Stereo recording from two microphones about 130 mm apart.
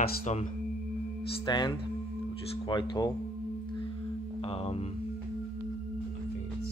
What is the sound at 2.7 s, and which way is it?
Speech, 35° left (ahead or behind).